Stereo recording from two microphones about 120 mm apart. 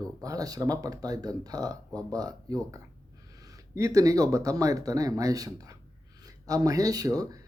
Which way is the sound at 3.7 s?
30° right (ahead or behind).